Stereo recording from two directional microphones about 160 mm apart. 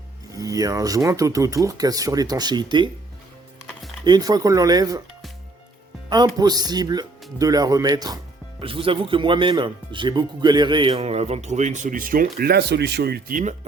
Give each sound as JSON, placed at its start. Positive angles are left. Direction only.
{"t": 0.3, "sound": "speech", "side_deg": -20}
{"t": 4.0, "sound": "speech", "side_deg": -25}
{"t": 6.1, "sound": "speech", "side_deg": -25}
{"t": 8.6, "sound": "speech", "side_deg": -35}